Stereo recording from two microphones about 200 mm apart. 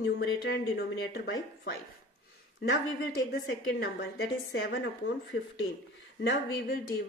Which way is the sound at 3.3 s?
55° left (ahead or behind).